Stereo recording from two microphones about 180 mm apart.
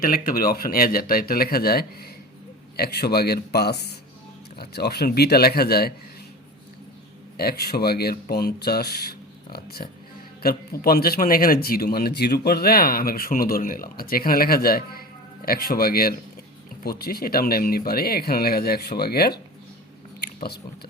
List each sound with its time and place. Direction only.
0.0 s speech: 50° left (ahead or behind)
7.3 s speech: 60° left (ahead or behind)
20.2 s biting: 60° left (ahead or behind)